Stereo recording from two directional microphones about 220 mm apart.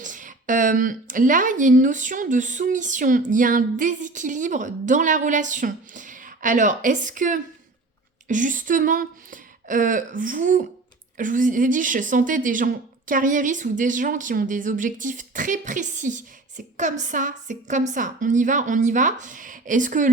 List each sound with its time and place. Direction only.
0.0 s speech: 35° right (ahead or behind)